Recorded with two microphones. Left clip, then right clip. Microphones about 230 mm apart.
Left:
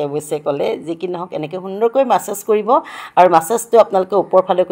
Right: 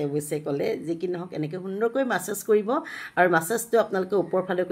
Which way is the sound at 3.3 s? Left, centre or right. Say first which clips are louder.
Left 10 dB; left.